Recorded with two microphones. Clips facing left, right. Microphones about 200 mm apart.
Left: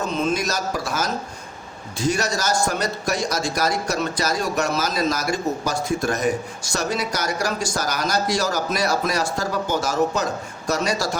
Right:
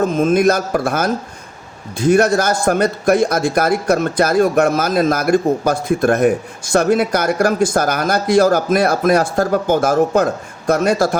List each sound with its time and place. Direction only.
0.0 s a man's voice: 50° right (ahead or behind)